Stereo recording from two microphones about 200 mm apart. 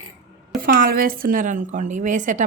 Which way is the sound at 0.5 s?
45° right (ahead or behind).